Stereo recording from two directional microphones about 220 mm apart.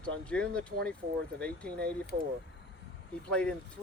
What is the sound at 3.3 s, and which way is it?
Speech, 5° left (ahead or behind).